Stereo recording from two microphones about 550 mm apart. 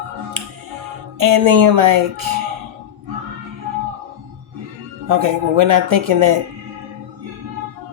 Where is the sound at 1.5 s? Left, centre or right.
Right.